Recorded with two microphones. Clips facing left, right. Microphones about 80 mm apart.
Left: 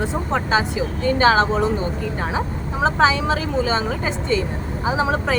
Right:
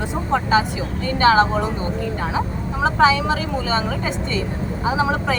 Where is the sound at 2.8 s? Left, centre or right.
Left.